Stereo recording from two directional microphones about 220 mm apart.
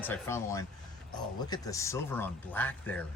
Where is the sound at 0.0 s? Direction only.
10° left (ahead or behind).